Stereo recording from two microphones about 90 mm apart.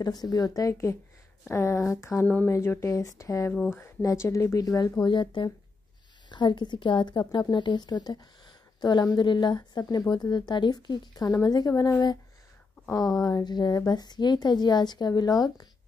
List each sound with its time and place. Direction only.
0.0 s speech: 45° left (ahead or behind); by 2.2 s 30° left (ahead or behind)
2.2 s speech: 15° left (ahead or behind)
2.5 s speech: 30° left (ahead or behind)
5.0 s a woman's voice: 60° left (ahead or behind); by 11.9 s 45° left (ahead or behind)
13.2 s a woman's voice: 50° left (ahead or behind)